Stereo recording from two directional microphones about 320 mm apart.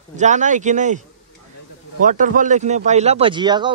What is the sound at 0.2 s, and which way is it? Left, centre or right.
Speech, right.